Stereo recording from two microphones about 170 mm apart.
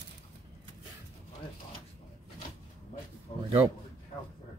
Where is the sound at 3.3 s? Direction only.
40° left (ahead or behind).